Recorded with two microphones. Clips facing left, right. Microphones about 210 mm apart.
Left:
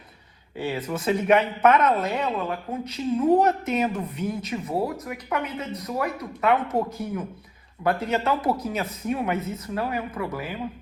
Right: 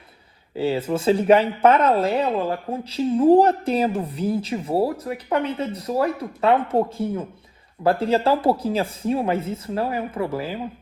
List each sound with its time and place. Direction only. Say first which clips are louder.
0.5 s speech: right 6 dB; 30° right (ahead or behind)